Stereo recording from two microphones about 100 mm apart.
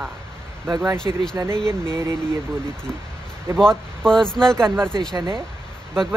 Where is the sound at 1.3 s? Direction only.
25° right (ahead or behind).